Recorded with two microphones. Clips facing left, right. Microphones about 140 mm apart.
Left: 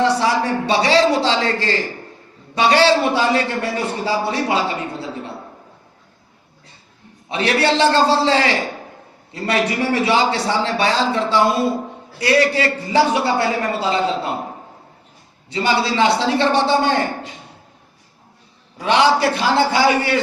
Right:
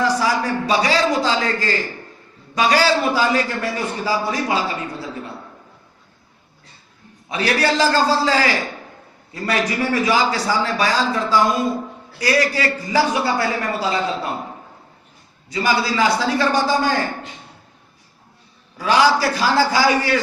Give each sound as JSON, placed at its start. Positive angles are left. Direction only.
{"t": 0.0, "sound": "a man's voice", "side_deg": 30}
{"t": 7.3, "sound": "a man's voice", "side_deg": 30}
{"t": 15.4, "sound": "a man's voice", "side_deg": 30}
{"t": 18.8, "sound": "a man's voice", "side_deg": 25}